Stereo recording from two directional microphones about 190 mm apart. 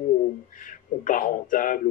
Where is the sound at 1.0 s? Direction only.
45° left (ahead or behind).